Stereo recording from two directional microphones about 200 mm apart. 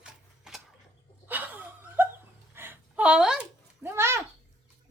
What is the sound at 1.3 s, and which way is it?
Laughter, 10° right (ahead or behind).